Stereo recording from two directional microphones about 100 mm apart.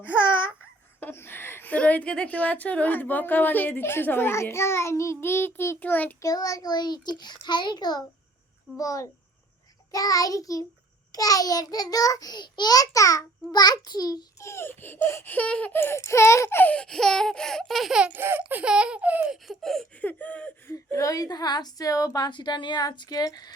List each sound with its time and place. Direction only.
0.0 s babbling: 20° left (ahead or behind)
0.9 s a woman's voice: 20° left (ahead or behind)
6.2 s a child's voice: 35° left (ahead or behind)
14.5 s a woman's voice: 20° left (ahead or behind)
15.7 s baby laughter: 25° left (ahead or behind); by 18.1 s 5° right (ahead or behind)
18.1 s speech: 20° right (ahead or behind)
19.3 s a sound: centre (ahead or behind)
20.0 s baby laughter: 15° left (ahead or behind)
20.7 s a woman's voice: 30° left (ahead or behind)